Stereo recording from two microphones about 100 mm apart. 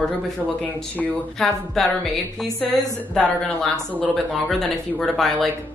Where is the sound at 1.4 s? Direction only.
5° left (ahead or behind).